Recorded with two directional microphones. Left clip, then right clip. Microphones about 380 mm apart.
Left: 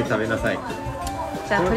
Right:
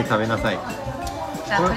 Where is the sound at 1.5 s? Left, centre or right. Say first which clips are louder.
Right 1 dB; centre.